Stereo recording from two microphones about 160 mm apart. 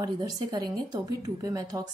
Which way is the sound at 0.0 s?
25° right (ahead or behind).